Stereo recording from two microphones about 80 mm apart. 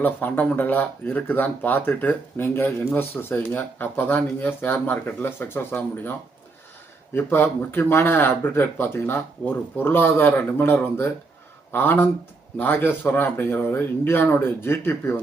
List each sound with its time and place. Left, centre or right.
0.0 s speech: left